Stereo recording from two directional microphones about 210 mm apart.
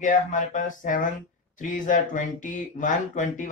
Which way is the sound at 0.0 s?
35° left (ahead or behind).